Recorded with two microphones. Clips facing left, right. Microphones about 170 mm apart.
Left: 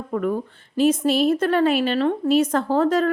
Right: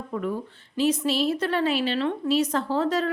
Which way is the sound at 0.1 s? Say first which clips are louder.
Left 6 dB; 55° left (ahead or behind).